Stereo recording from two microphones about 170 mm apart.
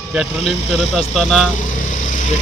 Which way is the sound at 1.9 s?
50° left (ahead or behind).